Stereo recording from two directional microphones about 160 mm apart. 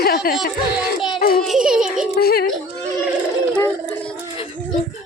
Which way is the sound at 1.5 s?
5° right (ahead or behind).